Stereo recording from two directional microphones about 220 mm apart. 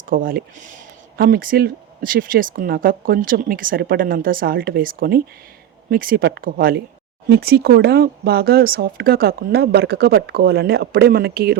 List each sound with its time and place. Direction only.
0.1 s speech: 40° right (ahead or behind)